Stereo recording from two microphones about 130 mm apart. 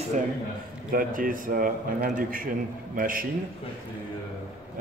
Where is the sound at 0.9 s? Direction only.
90° right.